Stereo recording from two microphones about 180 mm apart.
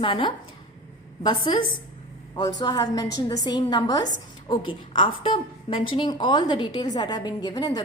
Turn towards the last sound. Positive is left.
turn(degrees=20)  # may be behind; listen again after turning